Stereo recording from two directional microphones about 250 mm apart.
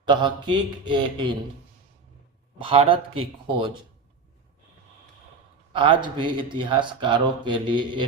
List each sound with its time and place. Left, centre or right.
0.0 s speech: centre
2.6 s speech: right
5.7 s speech: centre